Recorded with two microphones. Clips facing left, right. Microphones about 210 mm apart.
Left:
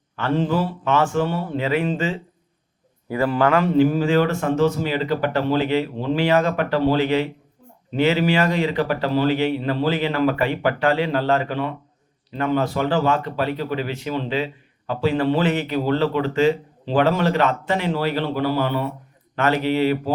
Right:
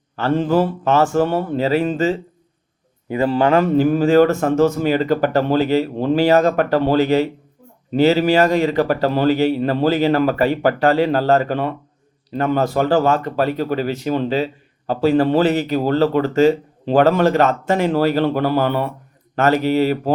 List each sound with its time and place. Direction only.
0.2 s a man's voice: 45° right (ahead or behind)
3.1 s a man's voice: 25° right (ahead or behind)
3.6 s speech: 45° right (ahead or behind)
19.4 s speech: 40° right (ahead or behind)